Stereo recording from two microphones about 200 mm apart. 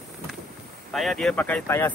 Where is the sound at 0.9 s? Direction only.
Centre (ahead or behind).